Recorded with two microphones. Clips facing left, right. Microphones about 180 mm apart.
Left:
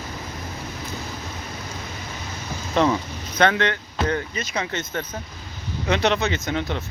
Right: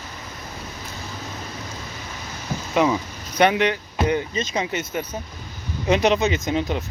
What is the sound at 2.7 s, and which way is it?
Speech, 5° right (ahead or behind).